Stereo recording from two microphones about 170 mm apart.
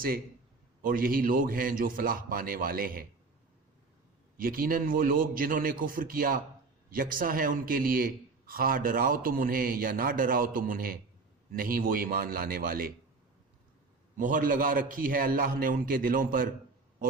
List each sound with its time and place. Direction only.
0.8 s a man's voice: 55° right (ahead or behind)
4.4 s a man's voice: 55° right (ahead or behind)
14.2 s a man's voice: 55° right (ahead or behind)